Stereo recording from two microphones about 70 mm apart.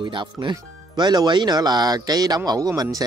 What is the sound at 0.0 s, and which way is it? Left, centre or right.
A man's voice, right.